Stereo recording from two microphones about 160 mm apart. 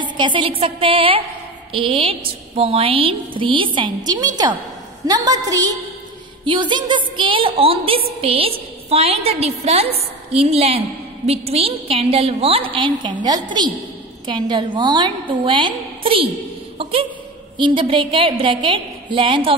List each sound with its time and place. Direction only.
0.2 s a woman's voice: 30° right (ahead or behind)
17.6 s a woman's voice: 30° right (ahead or behind)